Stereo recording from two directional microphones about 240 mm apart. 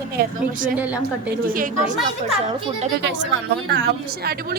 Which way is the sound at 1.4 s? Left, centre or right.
Right.